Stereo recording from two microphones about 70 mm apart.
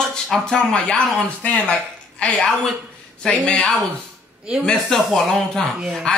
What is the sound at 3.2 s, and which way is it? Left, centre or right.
Speech, centre.